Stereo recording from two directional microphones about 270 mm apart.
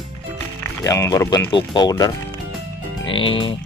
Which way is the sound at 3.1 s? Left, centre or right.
Centre.